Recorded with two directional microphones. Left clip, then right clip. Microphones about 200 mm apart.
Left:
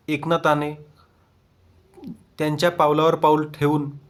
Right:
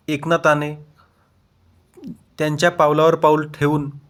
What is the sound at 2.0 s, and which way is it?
Speech, 15° right (ahead or behind).